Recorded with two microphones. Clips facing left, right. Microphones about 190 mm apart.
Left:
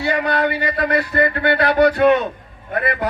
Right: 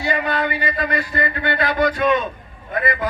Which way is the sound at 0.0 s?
65° left (ahead or behind).